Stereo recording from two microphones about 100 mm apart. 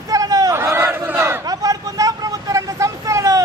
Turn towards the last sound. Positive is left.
turn(degrees=-35)  # may be behind; listen again after turning